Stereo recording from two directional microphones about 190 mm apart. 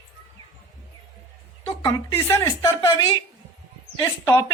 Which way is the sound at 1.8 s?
20° left (ahead or behind).